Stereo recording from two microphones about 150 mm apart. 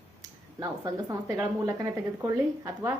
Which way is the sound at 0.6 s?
25° right (ahead or behind).